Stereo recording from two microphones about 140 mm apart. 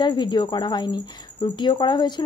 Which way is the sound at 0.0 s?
30° left (ahead or behind).